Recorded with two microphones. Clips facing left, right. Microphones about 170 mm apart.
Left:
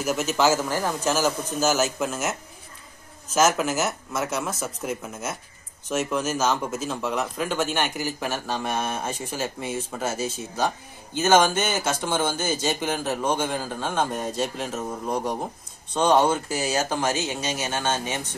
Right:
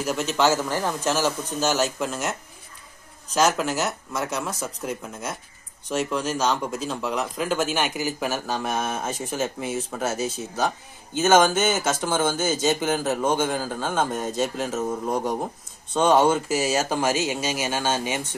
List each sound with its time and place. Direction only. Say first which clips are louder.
0.0 s speech: even; 5° left (ahead or behind)
3.3 s speech: even; 5° left (ahead or behind)